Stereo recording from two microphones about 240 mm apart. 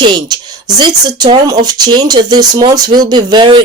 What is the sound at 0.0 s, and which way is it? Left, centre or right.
Speech, centre.